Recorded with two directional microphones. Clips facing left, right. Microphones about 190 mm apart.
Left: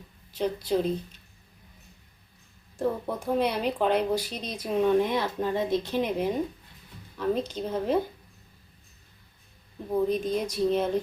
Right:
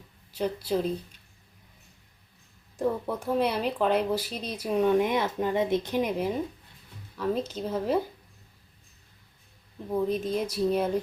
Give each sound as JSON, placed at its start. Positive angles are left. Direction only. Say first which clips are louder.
{"t": 0.3, "sound": "speech", "louder": "left 1 dB", "side_deg": -10}
{"t": 2.7, "sound": "speech", "louder": "even", "side_deg": -10}
{"t": 7.2, "sound": "a woman's voice", "louder": "left 1 dB", "side_deg": -5}
{"t": 10.1, "sound": "speech", "louder": "left 1 dB", "side_deg": -5}